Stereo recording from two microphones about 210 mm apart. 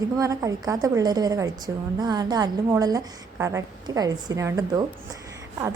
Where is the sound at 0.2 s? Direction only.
15° right (ahead or behind).